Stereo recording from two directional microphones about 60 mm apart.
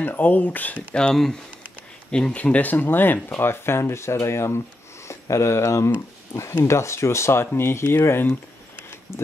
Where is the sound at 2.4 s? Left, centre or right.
Left.